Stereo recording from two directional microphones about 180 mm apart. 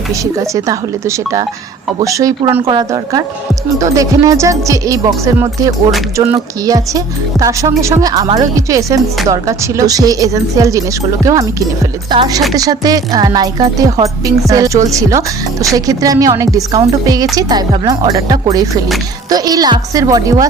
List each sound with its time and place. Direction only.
0.1 s speech: 15° right (ahead or behind)
2.6 s speech: 25° right (ahead or behind)